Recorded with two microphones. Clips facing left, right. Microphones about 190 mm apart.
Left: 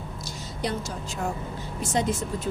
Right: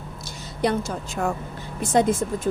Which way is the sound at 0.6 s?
55° right (ahead or behind).